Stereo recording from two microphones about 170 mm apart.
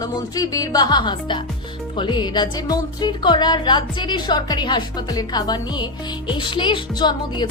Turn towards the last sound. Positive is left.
turn(degrees=25)  # may be behind; listen again after turning